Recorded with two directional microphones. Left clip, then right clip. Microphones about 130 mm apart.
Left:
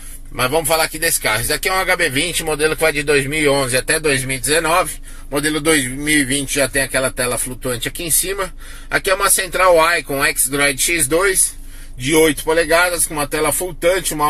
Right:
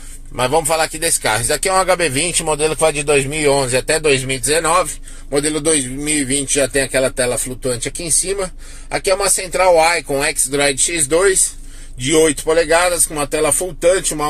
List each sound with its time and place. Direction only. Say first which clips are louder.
0.4 s speech: right 1 dB; 30° right (ahead or behind)